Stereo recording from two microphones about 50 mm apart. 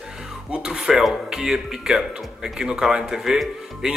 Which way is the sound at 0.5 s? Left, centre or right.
Centre.